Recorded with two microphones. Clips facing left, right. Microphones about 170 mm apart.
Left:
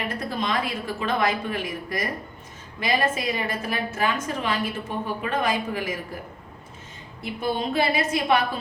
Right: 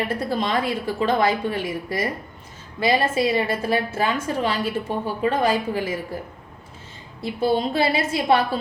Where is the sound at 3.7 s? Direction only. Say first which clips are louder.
Right 4 dB; 30° right (ahead or behind).